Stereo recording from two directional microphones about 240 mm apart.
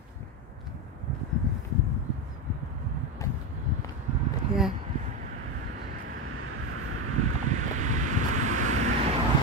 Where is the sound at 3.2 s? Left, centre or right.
Centre.